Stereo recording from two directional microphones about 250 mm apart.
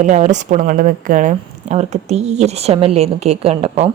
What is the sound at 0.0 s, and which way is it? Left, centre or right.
A woman's voice, right.